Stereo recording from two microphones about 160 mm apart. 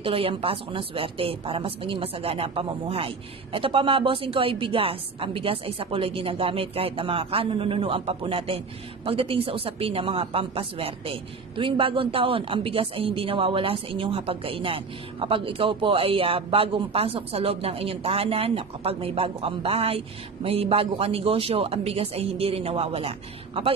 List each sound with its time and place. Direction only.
0.0 s speech: 35° right (ahead or behind)